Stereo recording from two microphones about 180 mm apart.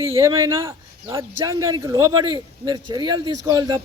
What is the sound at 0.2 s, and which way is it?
Speech, 20° right (ahead or behind).